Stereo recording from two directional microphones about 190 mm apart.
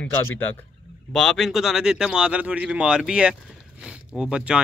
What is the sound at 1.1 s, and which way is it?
Speech, centre (ahead or behind).